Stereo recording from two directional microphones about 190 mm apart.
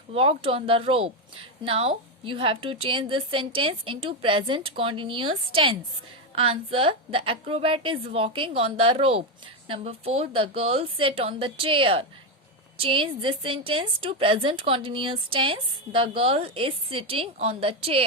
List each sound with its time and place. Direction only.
0.1 s a woman's voice: 30° right (ahead or behind)